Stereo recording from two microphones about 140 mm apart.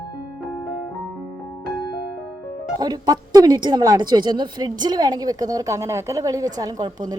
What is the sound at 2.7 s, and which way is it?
Speech, 30° right (ahead or behind).